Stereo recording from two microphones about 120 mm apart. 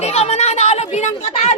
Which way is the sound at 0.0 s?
60° left (ahead or behind).